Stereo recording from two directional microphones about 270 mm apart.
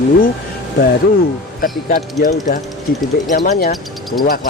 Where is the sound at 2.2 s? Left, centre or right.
Left.